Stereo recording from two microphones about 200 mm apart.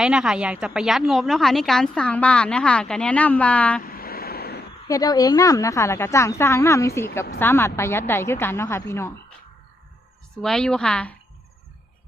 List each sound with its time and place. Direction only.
0.0 s a woman's voice: 5° right (ahead or behind)
3.8 s a sound: 50° left (ahead or behind)
4.9 s a woman's voice: 20° left (ahead or behind)
10.3 s a woman's voice: 5° left (ahead or behind)